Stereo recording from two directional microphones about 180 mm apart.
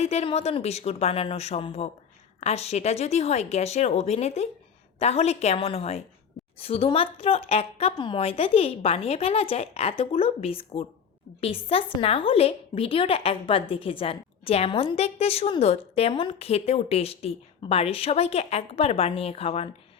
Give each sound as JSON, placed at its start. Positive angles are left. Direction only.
{"t": 0.0, "sound": "a woman's voice", "side_deg": 35}